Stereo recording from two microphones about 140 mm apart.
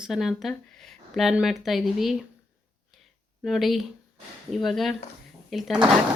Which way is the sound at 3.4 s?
Centre (ahead or behind).